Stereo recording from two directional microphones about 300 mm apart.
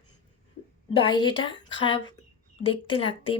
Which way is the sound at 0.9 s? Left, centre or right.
Centre.